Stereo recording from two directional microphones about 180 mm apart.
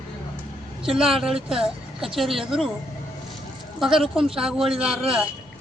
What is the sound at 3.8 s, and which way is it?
Speech, 5° right (ahead or behind).